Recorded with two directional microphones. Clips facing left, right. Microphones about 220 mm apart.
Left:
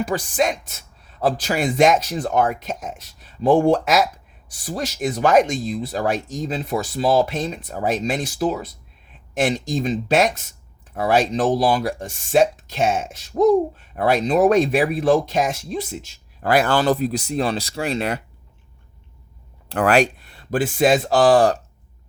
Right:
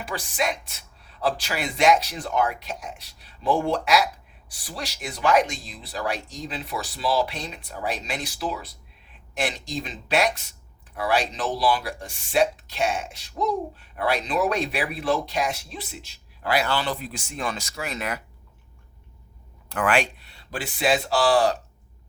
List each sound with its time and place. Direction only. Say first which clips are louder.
0.0 s speech: left 7 dB; 45° left (ahead or behind)
19.6 s speech: left 6 dB; 35° left (ahead or behind)